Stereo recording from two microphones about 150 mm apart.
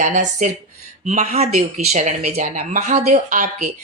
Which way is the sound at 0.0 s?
55° right (ahead or behind).